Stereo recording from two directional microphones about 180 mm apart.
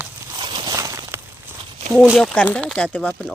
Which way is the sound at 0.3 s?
25° right (ahead or behind).